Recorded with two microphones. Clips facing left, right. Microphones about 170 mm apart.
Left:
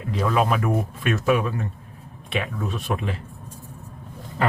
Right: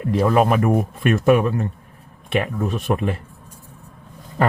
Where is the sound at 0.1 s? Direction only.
55° right (ahead or behind).